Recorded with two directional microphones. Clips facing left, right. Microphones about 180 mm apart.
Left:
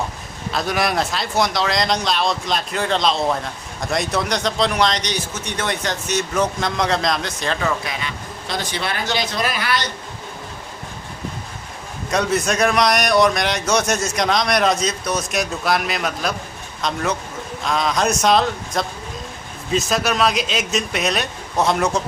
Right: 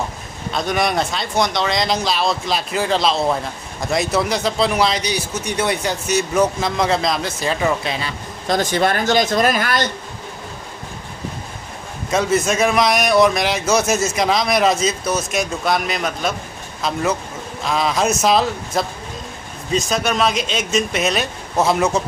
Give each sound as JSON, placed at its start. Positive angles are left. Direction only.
{"t": 0.5, "sound": "a man's voice", "side_deg": 0}
{"t": 7.6, "sound": "speech", "side_deg": -30}
{"t": 8.4, "sound": "speech", "side_deg": -45}
{"t": 12.1, "sound": "a man's voice", "side_deg": 0}